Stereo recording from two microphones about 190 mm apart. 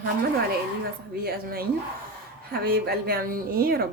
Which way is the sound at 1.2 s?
50° right (ahead or behind).